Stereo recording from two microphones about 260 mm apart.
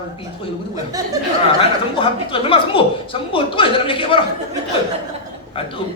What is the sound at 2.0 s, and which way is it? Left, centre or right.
A woman's voice, centre.